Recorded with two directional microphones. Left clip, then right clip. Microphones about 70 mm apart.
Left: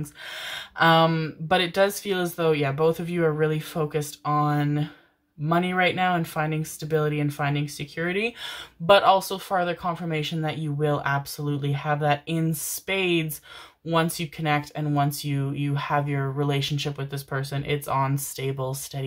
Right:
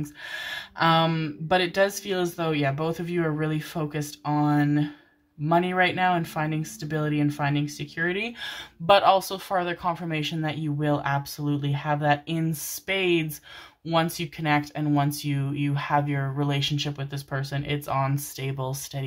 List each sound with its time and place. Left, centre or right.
0.7 s speech: centre
8.8 s speech: right
18.6 s speech: right